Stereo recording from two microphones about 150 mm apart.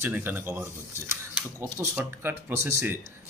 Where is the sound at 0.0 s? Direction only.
15° right (ahead or behind).